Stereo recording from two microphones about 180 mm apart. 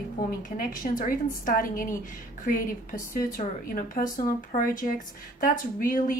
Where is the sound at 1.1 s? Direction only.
50° left (ahead or behind).